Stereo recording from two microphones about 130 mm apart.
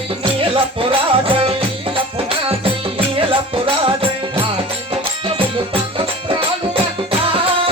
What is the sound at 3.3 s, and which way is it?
Music, 45° right (ahead or behind).